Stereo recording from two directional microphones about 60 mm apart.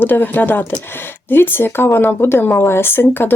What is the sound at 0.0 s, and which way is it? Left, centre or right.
Speech, left.